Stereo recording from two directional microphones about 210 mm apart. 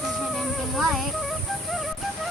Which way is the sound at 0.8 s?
Centre (ahead or behind).